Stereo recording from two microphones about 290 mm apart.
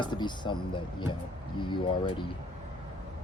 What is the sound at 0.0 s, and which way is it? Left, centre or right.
Speech, centre.